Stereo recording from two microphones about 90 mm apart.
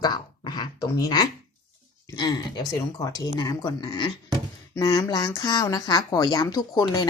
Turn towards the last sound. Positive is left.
turn(degrees=45)  # may be behind; listen again after turning